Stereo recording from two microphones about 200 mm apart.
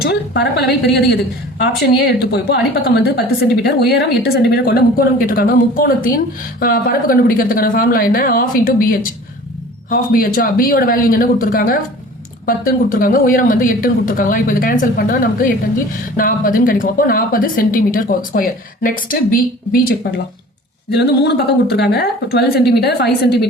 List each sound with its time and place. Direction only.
0.0 s a woman's voice: 55° left (ahead or behind)
2.3 s a woman's voice: 55° left (ahead or behind)
20.9 s a woman's voice: 55° left (ahead or behind)